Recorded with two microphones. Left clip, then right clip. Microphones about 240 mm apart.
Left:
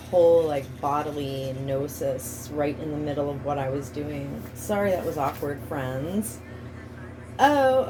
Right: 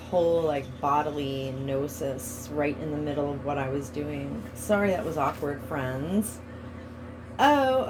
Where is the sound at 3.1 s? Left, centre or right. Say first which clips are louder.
Left 2 dB; right.